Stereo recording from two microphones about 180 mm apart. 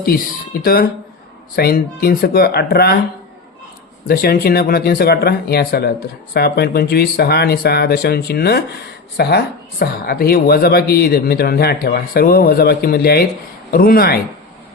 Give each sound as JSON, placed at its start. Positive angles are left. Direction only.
{"t": 0.6, "sound": "speech", "side_deg": 55}
{"t": 4.1, "sound": "speech", "side_deg": 55}